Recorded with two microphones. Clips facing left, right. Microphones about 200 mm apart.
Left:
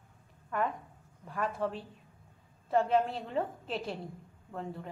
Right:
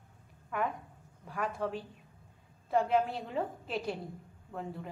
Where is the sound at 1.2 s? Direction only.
Centre (ahead or behind).